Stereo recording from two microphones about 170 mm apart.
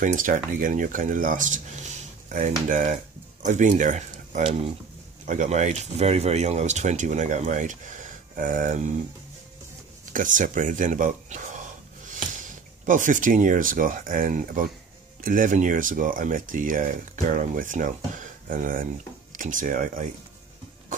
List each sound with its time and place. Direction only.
0.0 s speech: 50° right (ahead or behind)
10.1 s speech: 50° right (ahead or behind)